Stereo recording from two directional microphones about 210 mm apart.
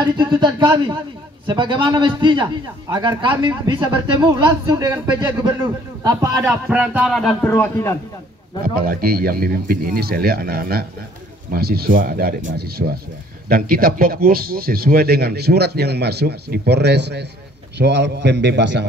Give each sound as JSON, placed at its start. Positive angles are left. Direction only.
{"t": 0.0, "sound": "a man's voice", "side_deg": -20}
{"t": 8.8, "sound": "a man's voice", "side_deg": -45}